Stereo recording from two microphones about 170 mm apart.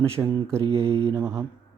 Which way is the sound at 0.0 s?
15° right (ahead or behind).